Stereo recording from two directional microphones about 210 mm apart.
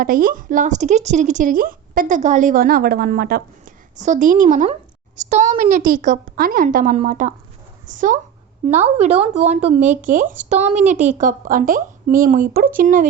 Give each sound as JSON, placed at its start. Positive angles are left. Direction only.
{"t": 0.0, "sound": "a woman's voice", "side_deg": -40}
{"t": 3.9, "sound": "a woman's voice", "side_deg": -35}
{"t": 10.9, "sound": "a woman's voice", "side_deg": -5}
{"t": 11.2, "sound": "a woman's voice", "side_deg": -40}